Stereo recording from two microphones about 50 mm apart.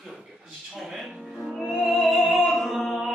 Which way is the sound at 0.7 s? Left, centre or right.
Centre.